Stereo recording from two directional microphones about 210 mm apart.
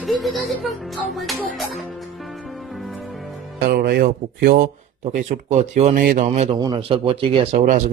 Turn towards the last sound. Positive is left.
turn(degrees=-40)  # may be behind; listen again after turning